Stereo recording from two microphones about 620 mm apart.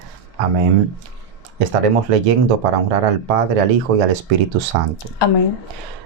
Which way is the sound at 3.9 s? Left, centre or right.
Right.